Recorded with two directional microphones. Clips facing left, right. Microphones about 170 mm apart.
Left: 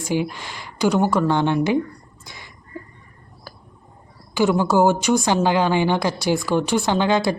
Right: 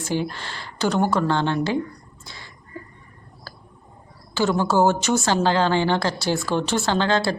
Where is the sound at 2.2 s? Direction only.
15° left (ahead or behind).